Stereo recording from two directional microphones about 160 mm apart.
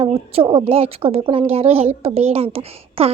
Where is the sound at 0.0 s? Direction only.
30° right (ahead or behind).